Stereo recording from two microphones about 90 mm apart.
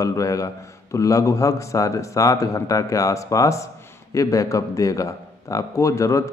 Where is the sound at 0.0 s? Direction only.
40° left (ahead or behind).